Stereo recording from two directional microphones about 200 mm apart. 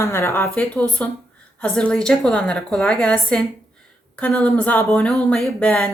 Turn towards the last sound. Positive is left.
turn(degrees=5)  # may be behind; listen again after turning